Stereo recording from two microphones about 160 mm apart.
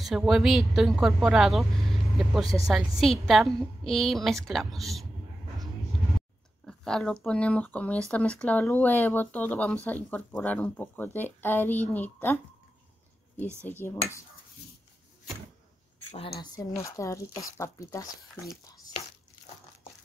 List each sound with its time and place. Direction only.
0.0 s a woman's voice: centre (ahead or behind)
6.6 s speech: 5° left (ahead or behind)
13.7 s speech: 15° left (ahead or behind)
16.2 s speech: 35° left (ahead or behind)
16.5 s speech: 20° left (ahead or behind)